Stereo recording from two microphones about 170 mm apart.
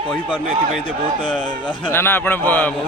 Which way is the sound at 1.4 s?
30° left (ahead or behind).